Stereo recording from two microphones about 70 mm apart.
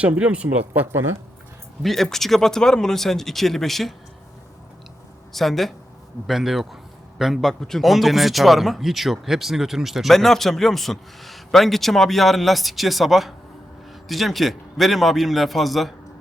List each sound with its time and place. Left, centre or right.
0.2 s speech: centre
1.8 s speech: centre
5.3 s speech: centre